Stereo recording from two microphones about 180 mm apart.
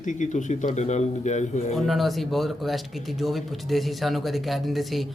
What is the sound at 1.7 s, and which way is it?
Speech, centre (ahead or behind).